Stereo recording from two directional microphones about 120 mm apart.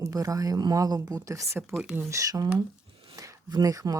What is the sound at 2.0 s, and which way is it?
Speech, 25° right (ahead or behind).